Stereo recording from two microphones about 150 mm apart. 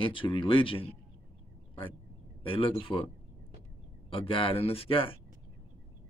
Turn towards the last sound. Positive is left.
turn(degrees=35)  # may be behind; listen again after turning